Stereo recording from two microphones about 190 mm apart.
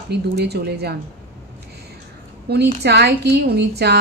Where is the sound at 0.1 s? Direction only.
60° right (ahead or behind).